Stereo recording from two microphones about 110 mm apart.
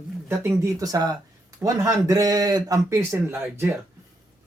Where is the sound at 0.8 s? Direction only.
35° right (ahead or behind); by 3.8 s 20° right (ahead or behind).